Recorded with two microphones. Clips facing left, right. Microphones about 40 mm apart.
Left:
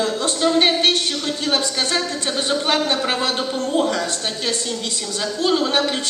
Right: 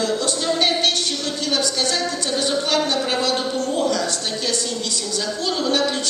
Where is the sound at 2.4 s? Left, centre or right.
Left.